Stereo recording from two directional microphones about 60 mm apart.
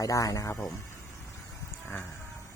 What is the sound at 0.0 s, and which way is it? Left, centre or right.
Speech, left.